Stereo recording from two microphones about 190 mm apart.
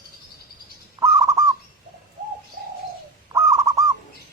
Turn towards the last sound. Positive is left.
turn(degrees=-15)  # may be behind; listen again after turning